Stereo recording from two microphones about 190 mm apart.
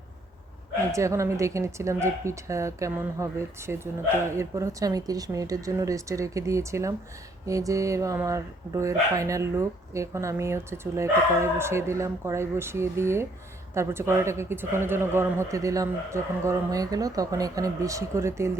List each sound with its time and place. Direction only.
0.9 s speech: 15° right (ahead or behind)